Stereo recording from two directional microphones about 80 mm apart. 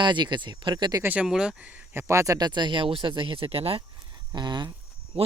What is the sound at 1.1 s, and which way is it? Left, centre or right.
Speech, centre.